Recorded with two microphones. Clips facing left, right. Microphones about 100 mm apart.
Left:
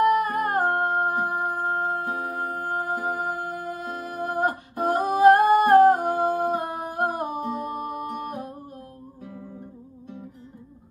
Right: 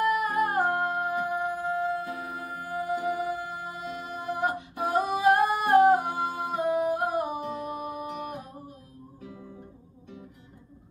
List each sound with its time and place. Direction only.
0.0 s music: 45° left (ahead or behind)